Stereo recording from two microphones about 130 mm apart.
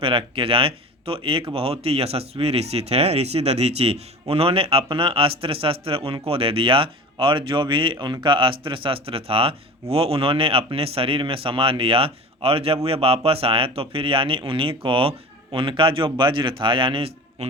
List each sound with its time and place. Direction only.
0.0 s a man's voice: 45° right (ahead or behind)